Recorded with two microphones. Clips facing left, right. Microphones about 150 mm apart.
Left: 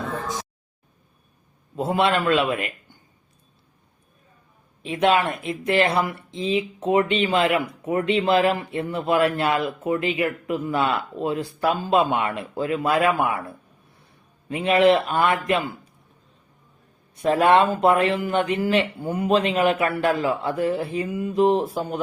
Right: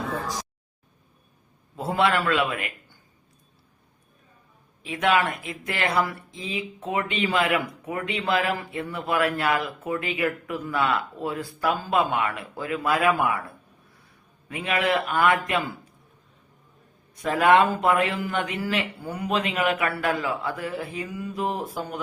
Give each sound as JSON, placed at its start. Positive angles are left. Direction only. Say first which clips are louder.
{"t": 0.0, "sound": "a sound", "louder": "left 1 dB", "side_deg": 0}
{"t": 1.7, "sound": "speech", "louder": "left 2 dB", "side_deg": 20}
{"t": 4.8, "sound": "speech", "louder": "left 3 dB", "side_deg": 25}
{"t": 14.5, "sound": "speech", "louder": "left 7 dB", "side_deg": 25}
{"t": 17.2, "sound": "speech", "louder": "left 2 dB", "side_deg": 30}